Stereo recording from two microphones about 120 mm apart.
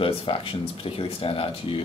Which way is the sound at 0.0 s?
50° left (ahead or behind).